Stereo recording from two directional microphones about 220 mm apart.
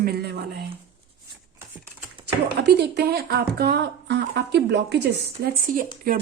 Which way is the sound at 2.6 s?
50° right (ahead or behind).